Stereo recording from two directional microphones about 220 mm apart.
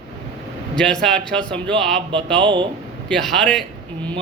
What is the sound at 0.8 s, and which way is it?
Speech, 5° left (ahead or behind).